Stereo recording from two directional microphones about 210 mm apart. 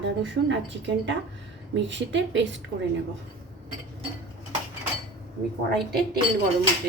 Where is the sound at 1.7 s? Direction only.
60° right (ahead or behind).